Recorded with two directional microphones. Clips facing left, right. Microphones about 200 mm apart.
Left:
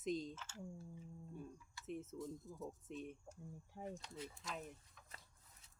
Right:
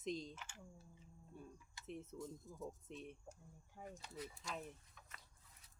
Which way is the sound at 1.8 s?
Centre (ahead or behind).